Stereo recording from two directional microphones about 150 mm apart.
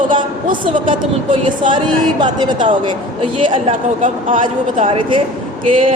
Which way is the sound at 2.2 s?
30° right (ahead or behind).